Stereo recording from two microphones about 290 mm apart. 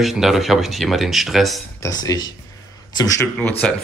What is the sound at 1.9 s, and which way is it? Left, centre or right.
Speech, centre.